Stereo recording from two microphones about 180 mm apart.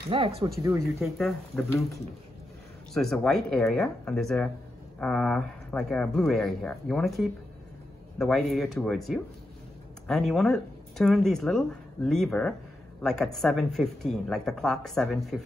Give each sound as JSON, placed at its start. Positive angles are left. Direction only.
{"t": 0.1, "sound": "speech", "side_deg": -30}
{"t": 0.7, "sound": "speech", "side_deg": -15}
{"t": 1.1, "sound": "speech", "side_deg": 0}
{"t": 2.9, "sound": "speech", "side_deg": 0}